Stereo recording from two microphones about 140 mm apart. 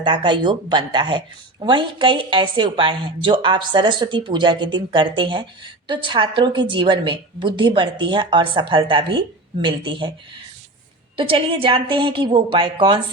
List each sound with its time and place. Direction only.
0.0 s speech: 35° right (ahead or behind)
11.2 s speech: 40° right (ahead or behind)